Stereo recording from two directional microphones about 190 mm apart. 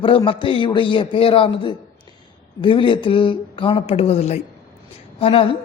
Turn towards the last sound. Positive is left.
turn(degrees=30)  # may be behind; listen again after turning